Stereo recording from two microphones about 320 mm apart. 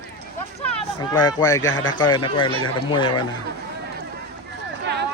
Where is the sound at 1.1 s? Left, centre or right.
Centre.